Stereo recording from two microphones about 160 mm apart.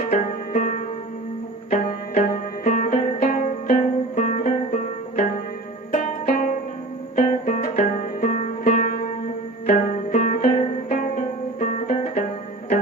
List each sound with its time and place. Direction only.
0.1 s music: 50° left (ahead or behind)